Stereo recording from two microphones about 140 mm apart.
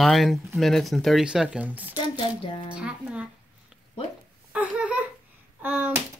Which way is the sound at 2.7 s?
10° right (ahead or behind).